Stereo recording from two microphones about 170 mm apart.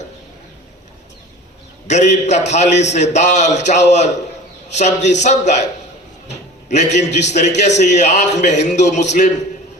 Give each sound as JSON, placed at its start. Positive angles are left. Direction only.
{"t": 1.9, "sound": "a man's voice", "side_deg": 45}